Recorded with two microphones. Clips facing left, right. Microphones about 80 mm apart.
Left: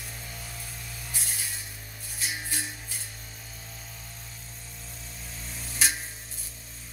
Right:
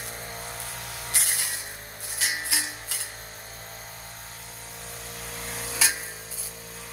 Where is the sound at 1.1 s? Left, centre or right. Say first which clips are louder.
Right 5 dB; right.